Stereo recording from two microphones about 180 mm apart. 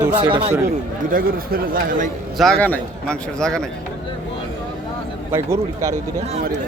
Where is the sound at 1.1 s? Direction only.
55° right (ahead or behind).